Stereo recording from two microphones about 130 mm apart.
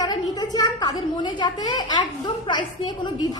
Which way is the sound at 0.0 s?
30° left (ahead or behind).